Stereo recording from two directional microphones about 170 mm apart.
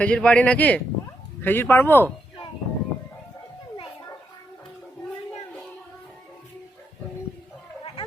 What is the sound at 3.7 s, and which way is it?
Children playing, 30° left (ahead or behind).